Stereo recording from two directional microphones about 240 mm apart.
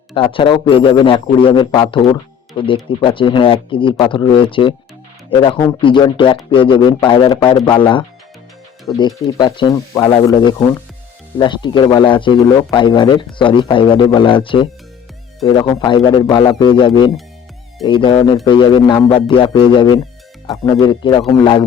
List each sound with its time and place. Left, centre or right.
0.1 s a man's voice: left